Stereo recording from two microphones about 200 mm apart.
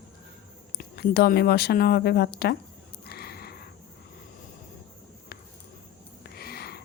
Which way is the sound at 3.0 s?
50° left (ahead or behind).